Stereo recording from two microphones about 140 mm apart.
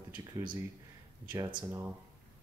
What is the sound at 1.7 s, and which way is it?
Speech, 20° right (ahead or behind).